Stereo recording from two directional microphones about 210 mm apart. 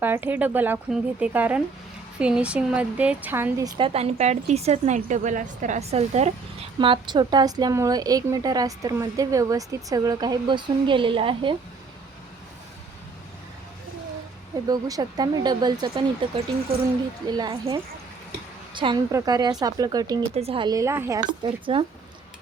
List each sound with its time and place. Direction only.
0.0 s speech: 10° right (ahead or behind)
3.8 s a woman's voice: 25° right (ahead or behind)
14.7 s a woman's voice: 15° right (ahead or behind)
17.3 s a woman's voice: 20° right (ahead or behind)
20.3 s a woman's voice: 30° right (ahead or behind)